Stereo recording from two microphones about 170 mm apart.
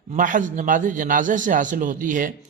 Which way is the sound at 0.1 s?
50° right (ahead or behind).